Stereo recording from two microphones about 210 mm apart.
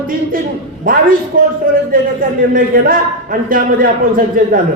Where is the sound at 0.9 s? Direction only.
40° right (ahead or behind).